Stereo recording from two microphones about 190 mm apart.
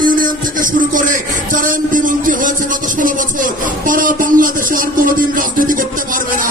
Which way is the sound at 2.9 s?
45° right (ahead or behind).